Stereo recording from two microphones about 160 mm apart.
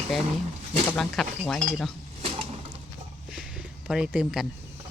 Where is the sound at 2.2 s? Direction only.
35° right (ahead or behind).